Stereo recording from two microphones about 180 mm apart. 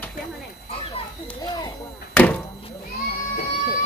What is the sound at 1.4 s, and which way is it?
Speech, 20° left (ahead or behind).